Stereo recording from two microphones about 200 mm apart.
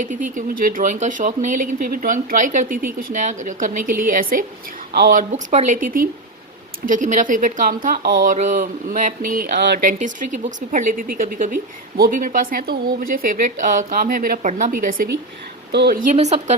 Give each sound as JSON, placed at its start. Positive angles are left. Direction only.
{"t": 0.0, "sound": "a woman's voice", "side_deg": -40}
{"t": 5.3, "sound": "speech", "side_deg": -35}
{"t": 9.8, "sound": "a woman's voice", "side_deg": -40}
{"t": 15.7, "sound": "a woman's voice", "side_deg": -55}
{"t": 16.1, "sound": "speech", "side_deg": -35}